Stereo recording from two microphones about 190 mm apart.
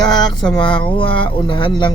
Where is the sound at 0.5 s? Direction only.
25° left (ahead or behind).